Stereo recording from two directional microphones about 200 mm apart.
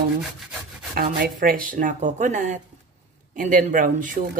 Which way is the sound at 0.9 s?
45° right (ahead or behind).